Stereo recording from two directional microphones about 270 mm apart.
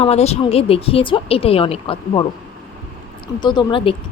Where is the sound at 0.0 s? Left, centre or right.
Left.